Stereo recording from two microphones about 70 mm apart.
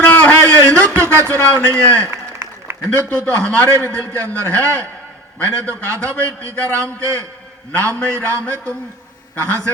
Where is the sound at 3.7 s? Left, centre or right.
Right.